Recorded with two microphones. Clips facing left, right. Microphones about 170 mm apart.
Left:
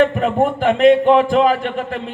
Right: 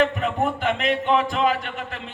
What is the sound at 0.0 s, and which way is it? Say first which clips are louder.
Speech: left 6 dB; 35° left (ahead or behind).